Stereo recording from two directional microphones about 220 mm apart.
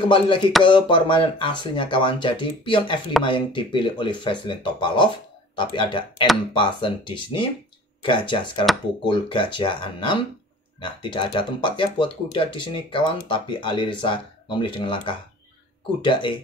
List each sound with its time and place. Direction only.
0.1 s speech: 20° left (ahead or behind)